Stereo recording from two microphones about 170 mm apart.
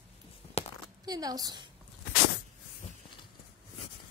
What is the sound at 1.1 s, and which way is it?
Speech, 20° right (ahead or behind).